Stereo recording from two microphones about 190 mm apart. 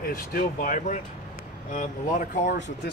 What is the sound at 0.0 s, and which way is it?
Speech, 50° left (ahead or behind).